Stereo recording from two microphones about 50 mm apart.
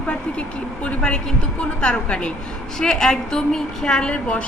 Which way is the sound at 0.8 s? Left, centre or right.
Left.